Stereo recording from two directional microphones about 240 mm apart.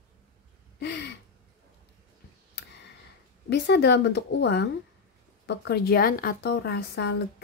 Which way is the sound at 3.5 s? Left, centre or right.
Left.